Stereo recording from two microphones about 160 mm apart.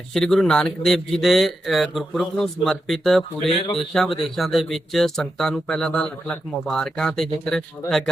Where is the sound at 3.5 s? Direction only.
35° left (ahead or behind).